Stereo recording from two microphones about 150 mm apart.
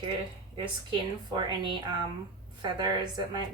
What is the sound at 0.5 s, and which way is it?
Speech, 30° right (ahead or behind).